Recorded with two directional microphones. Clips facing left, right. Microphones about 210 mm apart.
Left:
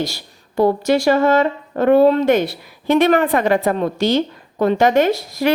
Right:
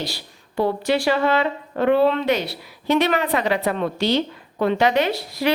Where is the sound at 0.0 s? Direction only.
45° left (ahead or behind).